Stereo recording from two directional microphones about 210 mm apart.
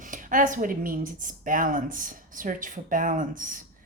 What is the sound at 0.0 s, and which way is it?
Speech, 40° right (ahead or behind).